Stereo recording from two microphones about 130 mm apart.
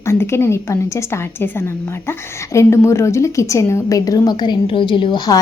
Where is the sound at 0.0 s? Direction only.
20° left (ahead or behind).